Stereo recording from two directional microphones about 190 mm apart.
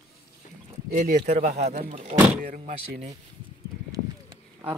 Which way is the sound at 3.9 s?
20° right (ahead or behind).